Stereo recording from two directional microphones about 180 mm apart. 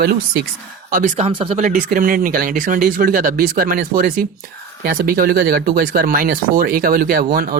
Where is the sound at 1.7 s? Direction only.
45° right (ahead or behind).